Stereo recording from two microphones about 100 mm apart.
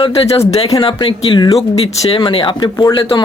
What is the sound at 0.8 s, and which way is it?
Speech, 60° left (ahead or behind).